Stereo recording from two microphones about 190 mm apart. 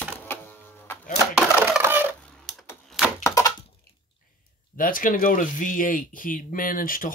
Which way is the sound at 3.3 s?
15° left (ahead or behind).